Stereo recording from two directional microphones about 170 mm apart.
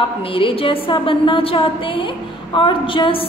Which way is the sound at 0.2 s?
30° left (ahead or behind).